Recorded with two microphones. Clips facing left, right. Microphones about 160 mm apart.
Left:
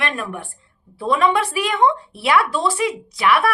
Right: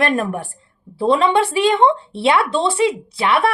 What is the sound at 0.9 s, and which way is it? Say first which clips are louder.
Speech: right 3 dB; 30° right (ahead or behind).